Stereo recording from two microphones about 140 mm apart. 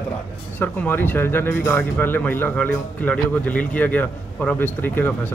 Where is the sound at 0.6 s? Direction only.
15° left (ahead or behind).